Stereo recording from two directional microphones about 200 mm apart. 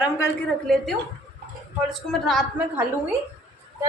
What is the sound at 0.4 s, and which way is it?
Speech, 5° left (ahead or behind).